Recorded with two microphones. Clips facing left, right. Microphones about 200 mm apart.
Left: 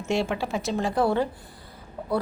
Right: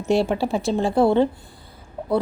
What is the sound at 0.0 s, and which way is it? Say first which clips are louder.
A woman's voice: right 6 dB; 35° right (ahead or behind).